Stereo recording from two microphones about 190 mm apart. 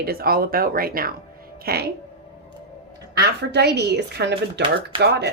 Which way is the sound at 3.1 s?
60° right (ahead or behind).